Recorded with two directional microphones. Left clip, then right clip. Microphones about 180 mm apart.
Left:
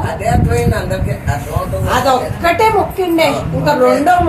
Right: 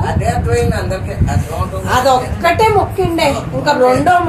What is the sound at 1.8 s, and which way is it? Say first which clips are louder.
A woman's voice: right 1 dB; 25° right (ahead or behind).